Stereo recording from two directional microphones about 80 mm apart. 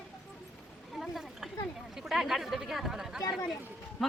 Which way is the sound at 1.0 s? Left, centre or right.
Centre.